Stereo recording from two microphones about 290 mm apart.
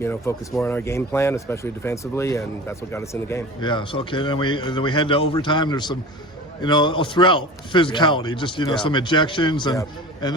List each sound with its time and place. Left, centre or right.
0.0 s speech: centre